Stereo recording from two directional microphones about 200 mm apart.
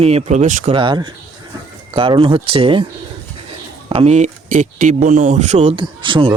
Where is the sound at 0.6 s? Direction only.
25° right (ahead or behind).